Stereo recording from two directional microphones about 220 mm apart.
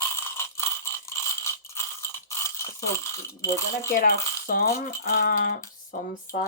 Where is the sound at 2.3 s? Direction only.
10° left (ahead or behind).